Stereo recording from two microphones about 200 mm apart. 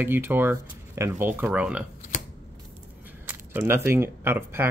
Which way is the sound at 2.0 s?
40° left (ahead or behind).